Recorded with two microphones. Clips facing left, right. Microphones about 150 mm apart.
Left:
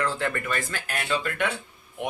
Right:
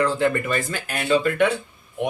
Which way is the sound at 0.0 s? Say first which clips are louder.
Right 7 dB; 15° right (ahead or behind).